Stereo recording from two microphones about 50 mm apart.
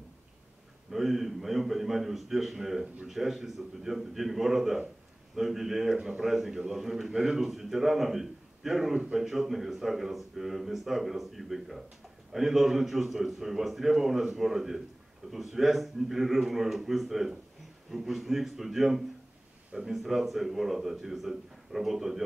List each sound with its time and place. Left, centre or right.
0.9 s speech: centre
19.7 s speech: centre
20.0 s speech: centre